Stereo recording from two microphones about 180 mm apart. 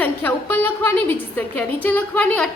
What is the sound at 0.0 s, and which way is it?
A woman's voice, 10° left (ahead or behind).